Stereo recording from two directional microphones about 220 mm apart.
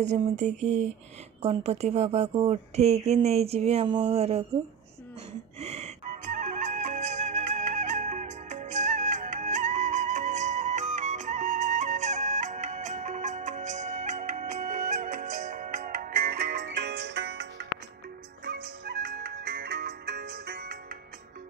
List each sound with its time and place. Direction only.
0.0 s a sound: 30° right (ahead or behind)
1.4 s speech: 30° right (ahead or behind)
5.6 s flute: 30° right (ahead or behind); by 17.6 s 50° right (ahead or behind)
18.4 s music: 45° right (ahead or behind)